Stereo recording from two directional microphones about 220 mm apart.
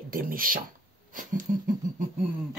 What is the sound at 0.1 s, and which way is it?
Speech, 40° right (ahead or behind).